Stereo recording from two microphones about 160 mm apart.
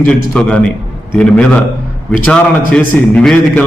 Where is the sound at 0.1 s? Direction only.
5° left (ahead or behind).